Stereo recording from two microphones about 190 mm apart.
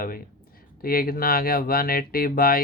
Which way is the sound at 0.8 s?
50° left (ahead or behind).